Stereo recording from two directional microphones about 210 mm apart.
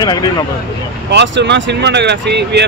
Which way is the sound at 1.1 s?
55° right (ahead or behind).